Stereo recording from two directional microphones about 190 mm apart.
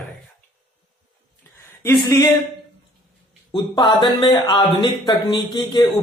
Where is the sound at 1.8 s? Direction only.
20° left (ahead or behind).